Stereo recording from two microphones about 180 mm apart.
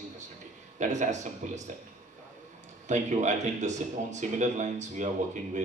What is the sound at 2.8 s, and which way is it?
A man's voice, 40° right (ahead or behind).